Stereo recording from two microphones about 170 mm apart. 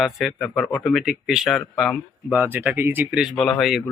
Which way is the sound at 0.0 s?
5° right (ahead or behind).